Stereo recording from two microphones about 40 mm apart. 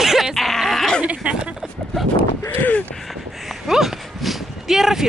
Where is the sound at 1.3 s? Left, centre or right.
Right.